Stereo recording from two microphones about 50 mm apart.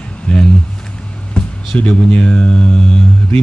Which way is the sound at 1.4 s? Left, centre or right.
Centre.